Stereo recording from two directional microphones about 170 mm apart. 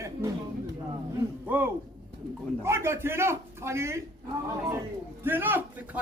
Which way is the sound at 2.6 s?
15° right (ahead or behind).